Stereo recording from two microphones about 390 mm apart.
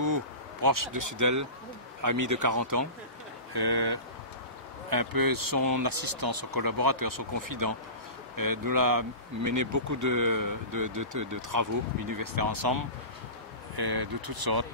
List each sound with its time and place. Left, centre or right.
0.0 s speech: right
3.5 s speech: right
4.8 s speech: right